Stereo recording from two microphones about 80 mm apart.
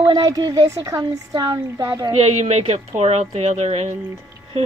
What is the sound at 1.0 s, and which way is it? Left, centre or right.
Speech, right.